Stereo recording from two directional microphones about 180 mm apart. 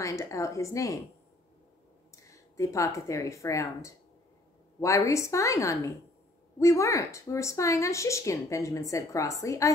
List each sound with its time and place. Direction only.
0.0 s speech: 15° left (ahead or behind)
2.2 s a woman's voice: 15° left (ahead or behind)